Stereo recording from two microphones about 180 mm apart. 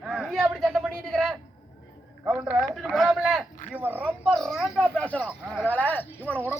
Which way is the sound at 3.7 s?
10° right (ahead or behind).